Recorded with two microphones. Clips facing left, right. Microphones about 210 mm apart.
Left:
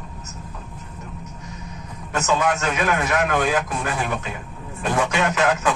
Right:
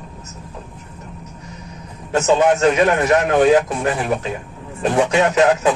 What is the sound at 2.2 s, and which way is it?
Speech, 30° right (ahead or behind).